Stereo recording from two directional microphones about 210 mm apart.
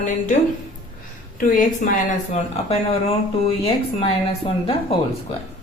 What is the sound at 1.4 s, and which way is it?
A woman's voice, 40° left (ahead or behind).